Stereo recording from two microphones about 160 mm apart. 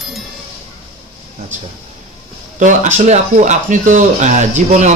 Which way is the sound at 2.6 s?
50° right (ahead or behind).